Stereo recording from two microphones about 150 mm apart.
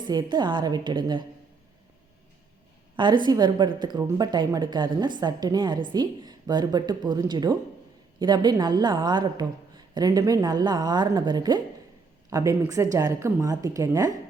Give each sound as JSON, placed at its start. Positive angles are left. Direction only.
{"t": 0.1, "sound": "a woman's voice", "side_deg": -30}
{"t": 2.9, "sound": "a woman's voice", "side_deg": -30}